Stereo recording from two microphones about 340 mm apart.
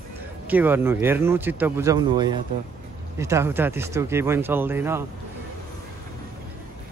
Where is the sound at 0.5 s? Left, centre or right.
Centre.